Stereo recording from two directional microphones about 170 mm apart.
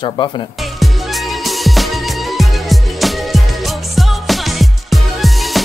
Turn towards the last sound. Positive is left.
turn(degrees=0)  # may be behind; listen again after turning